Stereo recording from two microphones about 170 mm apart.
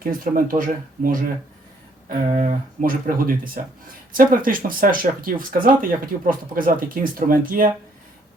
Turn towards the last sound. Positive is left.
turn(degrees=-55)  # may be behind; listen again after turning